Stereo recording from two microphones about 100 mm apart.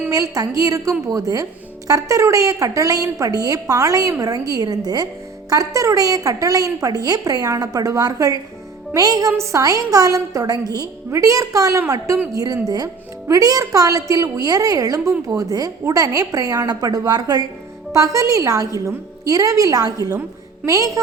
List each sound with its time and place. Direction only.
0.1 s a woman's voice: 35° right (ahead or behind)